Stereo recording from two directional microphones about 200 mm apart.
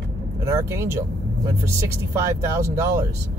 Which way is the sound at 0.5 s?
15° right (ahead or behind).